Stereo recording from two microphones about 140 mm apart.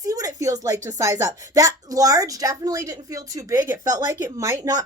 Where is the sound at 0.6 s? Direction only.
20° right (ahead or behind).